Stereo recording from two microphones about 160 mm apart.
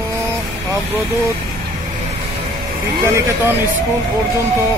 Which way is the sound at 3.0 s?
15° right (ahead or behind).